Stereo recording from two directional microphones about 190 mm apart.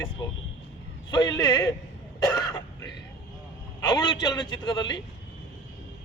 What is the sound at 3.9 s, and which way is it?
Speech, 20° left (ahead or behind).